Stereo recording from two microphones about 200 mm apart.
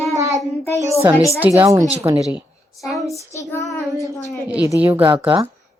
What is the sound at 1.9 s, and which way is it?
Speech, 30° right (ahead or behind).